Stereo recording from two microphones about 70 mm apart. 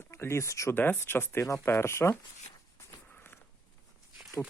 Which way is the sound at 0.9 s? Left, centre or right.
Left.